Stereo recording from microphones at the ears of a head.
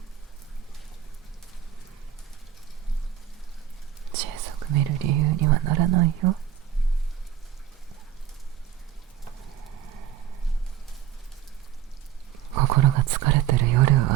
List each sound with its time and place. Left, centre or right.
4.1 s speech: right
9.4 s a sound: right
12.5 s whispering: right